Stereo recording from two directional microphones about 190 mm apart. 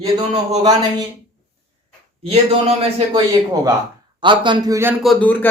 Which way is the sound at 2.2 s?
30° right (ahead or behind).